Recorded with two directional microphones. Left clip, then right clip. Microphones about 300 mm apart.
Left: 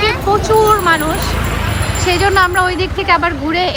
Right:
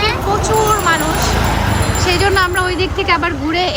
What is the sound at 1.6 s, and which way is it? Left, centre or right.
Vehicle, right.